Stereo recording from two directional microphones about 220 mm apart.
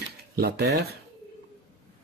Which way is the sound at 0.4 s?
45° right (ahead or behind).